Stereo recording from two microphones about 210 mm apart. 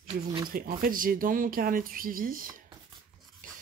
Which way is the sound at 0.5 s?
45° right (ahead or behind).